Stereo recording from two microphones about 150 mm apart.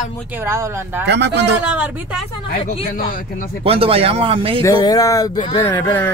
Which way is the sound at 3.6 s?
40° right (ahead or behind).